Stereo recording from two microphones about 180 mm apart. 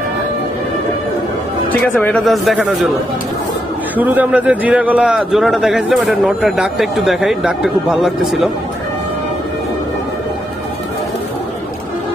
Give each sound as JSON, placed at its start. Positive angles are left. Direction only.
{"t": 2.0, "sound": "a man's voice", "side_deg": 5}
{"t": 3.9, "sound": "a man's voice", "side_deg": -10}